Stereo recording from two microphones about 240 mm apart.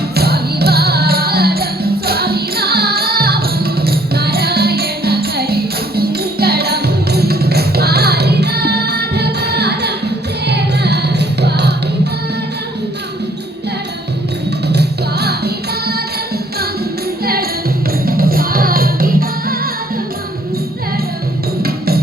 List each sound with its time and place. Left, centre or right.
0.2 s music: right
14.7 s music: right
17.2 s music: right
21.6 s music: right